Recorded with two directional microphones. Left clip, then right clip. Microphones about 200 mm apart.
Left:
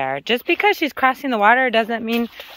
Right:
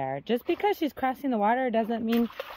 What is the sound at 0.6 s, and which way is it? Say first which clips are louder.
Speech: left 9 dB; centre (ahead or behind).